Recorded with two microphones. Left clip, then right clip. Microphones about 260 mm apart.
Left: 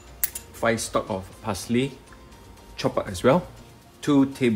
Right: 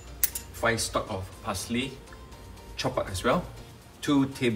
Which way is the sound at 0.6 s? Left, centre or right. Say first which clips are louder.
Left 3 dB; left.